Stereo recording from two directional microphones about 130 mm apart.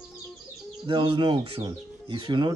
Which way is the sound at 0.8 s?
40° right (ahead or behind).